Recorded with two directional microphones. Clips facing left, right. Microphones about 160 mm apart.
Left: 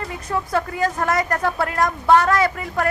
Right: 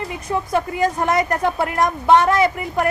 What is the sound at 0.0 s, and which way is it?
Speech, 20° right (ahead or behind).